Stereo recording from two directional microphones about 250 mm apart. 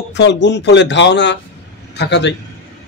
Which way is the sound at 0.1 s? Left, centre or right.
Left.